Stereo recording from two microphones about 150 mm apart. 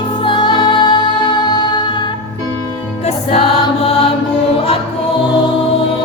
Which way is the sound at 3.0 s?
40° left (ahead or behind).